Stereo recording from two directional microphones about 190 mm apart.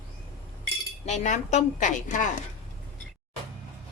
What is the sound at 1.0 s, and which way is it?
A woman's voice, 40° left (ahead or behind).